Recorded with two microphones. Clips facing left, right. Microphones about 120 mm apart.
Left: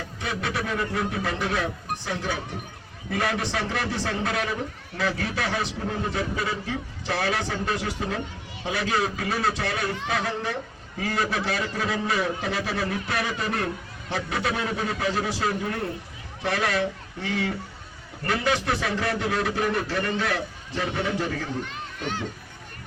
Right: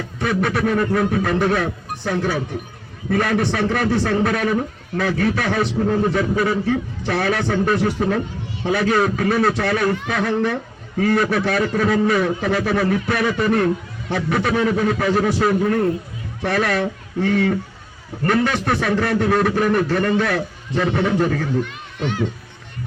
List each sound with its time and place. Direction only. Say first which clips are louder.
0.2 s a man's voice: right 10 dB; 55° right (ahead or behind)